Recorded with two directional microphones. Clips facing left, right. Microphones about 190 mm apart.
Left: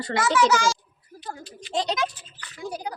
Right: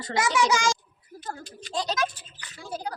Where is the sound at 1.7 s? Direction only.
20° left (ahead or behind).